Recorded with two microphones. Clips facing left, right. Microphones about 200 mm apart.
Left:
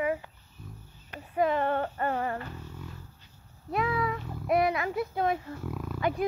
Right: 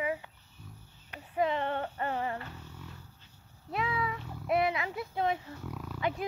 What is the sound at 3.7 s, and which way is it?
Speech, 50° left (ahead or behind).